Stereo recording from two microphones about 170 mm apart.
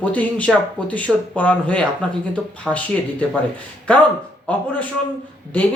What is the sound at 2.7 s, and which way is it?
Speech, 5° right (ahead or behind).